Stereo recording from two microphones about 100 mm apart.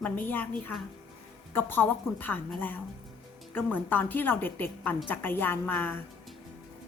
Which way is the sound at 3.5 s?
15° left (ahead or behind).